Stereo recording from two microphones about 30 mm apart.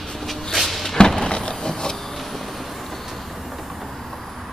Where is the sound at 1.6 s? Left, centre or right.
Left.